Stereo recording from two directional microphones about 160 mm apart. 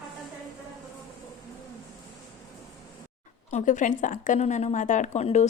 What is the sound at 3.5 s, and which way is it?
A woman's voice, 50° left (ahead or behind).